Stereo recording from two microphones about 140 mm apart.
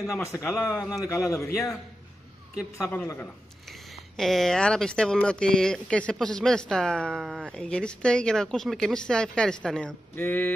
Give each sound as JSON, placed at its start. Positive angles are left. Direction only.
{"t": 0.1, "sound": "a man's voice", "side_deg": 20}
{"t": 2.8, "sound": "a woman's voice", "side_deg": 10}
{"t": 3.6, "sound": "speech", "side_deg": 0}